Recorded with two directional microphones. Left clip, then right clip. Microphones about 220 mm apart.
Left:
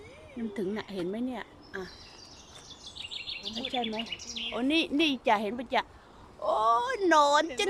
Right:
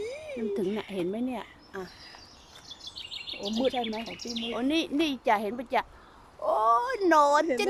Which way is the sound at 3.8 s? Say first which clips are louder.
Even; 25° right (ahead or behind).